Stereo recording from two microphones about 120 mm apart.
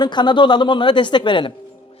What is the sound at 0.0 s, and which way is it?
A woman's voice, 40° left (ahead or behind).